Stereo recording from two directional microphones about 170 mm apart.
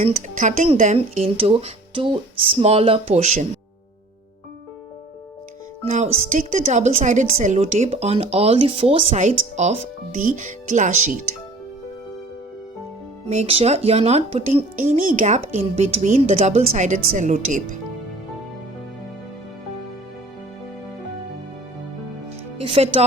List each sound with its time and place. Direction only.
0.0 s speech: 40° right (ahead or behind)
5.8 s speech: 45° right (ahead or behind)
13.2 s speech: 40° right (ahead or behind)
22.5 s speech: 30° right (ahead or behind)